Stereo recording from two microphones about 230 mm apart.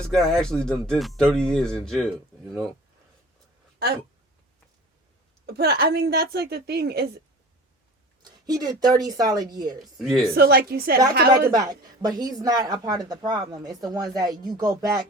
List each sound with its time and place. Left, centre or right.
0.1 s speech: centre
5.5 s a woman's voice: right
8.2 s a woman's voice: centre
9.8 s speech: centre
10.3 s a woman's voice: right
11.5 s speech: centre